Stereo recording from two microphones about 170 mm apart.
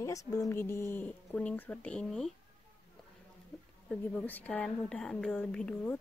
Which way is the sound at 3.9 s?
10° left (ahead or behind).